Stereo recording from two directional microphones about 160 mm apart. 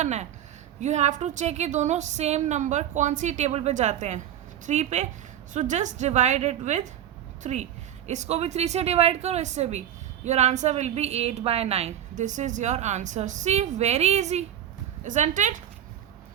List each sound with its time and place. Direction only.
0.0 s a woman's voice: 45° right (ahead or behind)